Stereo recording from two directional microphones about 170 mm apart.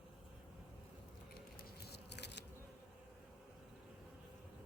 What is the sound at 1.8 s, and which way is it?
Biting, 75° left (ahead or behind).